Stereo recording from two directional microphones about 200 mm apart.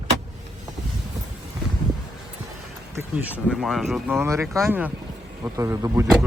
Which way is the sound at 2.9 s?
10° right (ahead or behind).